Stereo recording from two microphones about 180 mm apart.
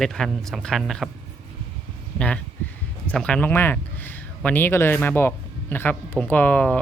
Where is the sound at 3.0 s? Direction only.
5° left (ahead or behind).